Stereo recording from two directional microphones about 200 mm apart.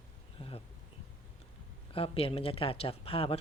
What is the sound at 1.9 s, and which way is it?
Speech, 30° left (ahead or behind).